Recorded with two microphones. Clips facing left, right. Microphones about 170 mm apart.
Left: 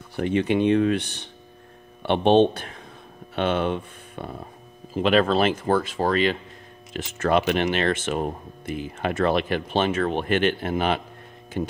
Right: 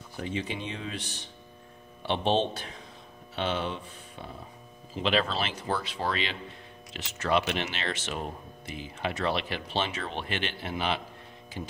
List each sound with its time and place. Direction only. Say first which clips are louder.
0.1 s speech: left 12 dB; 65° left (ahead or behind)